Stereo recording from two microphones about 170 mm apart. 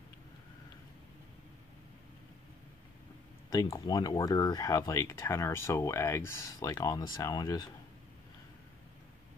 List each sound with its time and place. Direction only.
3.7 s speech: 20° left (ahead or behind)